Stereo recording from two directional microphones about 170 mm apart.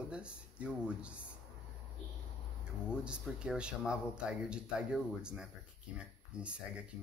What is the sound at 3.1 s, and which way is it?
Speech, 5° right (ahead or behind).